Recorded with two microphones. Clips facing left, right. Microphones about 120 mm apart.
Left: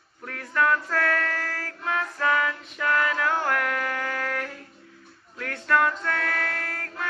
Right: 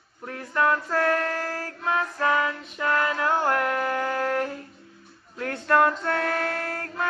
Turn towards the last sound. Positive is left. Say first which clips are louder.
# right 4 dB
turn(degrees=-35)  # may be behind; listen again after turning